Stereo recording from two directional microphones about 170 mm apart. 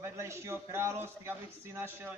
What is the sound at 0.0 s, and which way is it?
A man's voice, 15° right (ahead or behind).